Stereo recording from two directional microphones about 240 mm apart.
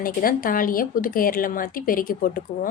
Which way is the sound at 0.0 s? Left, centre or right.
Left.